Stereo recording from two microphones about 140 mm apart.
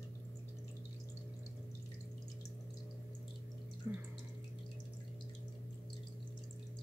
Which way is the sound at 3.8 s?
15° right (ahead or behind).